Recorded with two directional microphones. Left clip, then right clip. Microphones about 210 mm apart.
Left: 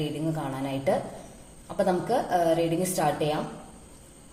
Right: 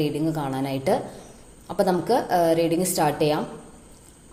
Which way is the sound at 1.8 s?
35° right (ahead or behind).